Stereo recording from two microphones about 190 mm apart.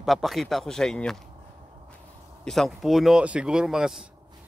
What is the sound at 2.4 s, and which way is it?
A man's voice, centre (ahead or behind).